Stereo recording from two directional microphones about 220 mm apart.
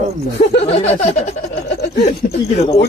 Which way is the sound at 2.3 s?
30° left (ahead or behind).